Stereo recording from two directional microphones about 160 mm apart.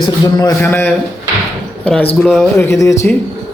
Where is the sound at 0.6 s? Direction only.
10° left (ahead or behind).